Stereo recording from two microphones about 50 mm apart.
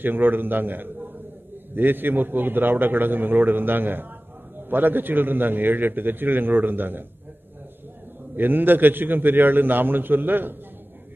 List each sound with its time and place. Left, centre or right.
0.0 s a man's voice: right
8.4 s a man's voice: right